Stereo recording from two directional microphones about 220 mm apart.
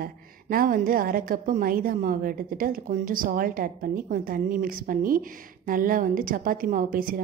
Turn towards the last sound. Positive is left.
turn(degrees=-40)  # may be behind; listen again after turning